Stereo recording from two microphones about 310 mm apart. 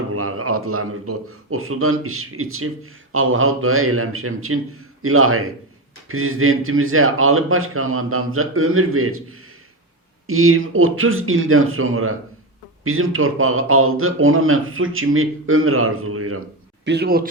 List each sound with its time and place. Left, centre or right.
0.1 s speech: right
10.2 s speech: right
16.8 s speech: right